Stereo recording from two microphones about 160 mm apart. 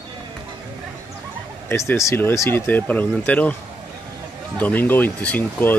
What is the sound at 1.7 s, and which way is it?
Speech, 15° left (ahead or behind).